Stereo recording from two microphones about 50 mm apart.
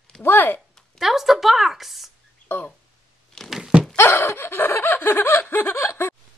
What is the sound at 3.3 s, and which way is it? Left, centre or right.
Thunk, centre.